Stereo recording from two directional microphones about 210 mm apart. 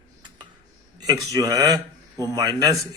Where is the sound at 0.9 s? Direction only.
20° right (ahead or behind).